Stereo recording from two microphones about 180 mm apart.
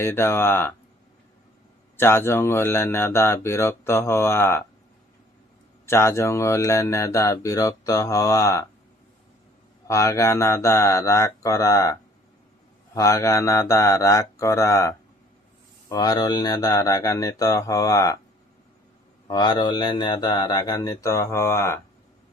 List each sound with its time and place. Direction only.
0.0 s speech: 10° left (ahead or behind)
2.0 s speech: 15° left (ahead or behind)
5.8 s speech: 15° left (ahead or behind)
9.8 s speech: 15° left (ahead or behind)
19.3 s speech: 25° left (ahead or behind)